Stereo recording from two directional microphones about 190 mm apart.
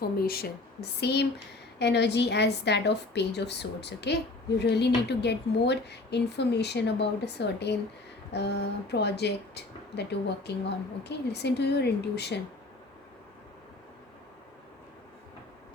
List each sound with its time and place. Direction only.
0.0 s a woman's voice: 50° left (ahead or behind)